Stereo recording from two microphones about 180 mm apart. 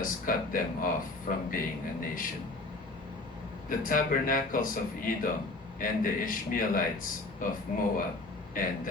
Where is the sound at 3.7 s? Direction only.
50° left (ahead or behind).